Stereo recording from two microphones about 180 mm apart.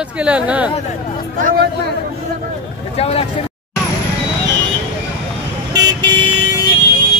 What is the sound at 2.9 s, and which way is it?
Speech, 35° left (ahead or behind).